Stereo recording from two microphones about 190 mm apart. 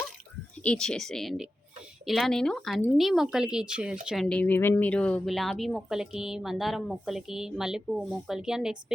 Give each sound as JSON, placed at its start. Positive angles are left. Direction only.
{"t": 0.6, "sound": "speech", "side_deg": 5}